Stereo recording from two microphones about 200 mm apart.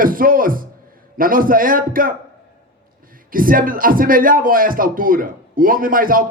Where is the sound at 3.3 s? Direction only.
45° right (ahead or behind).